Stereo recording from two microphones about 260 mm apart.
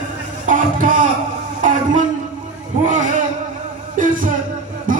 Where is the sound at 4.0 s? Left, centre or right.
Right.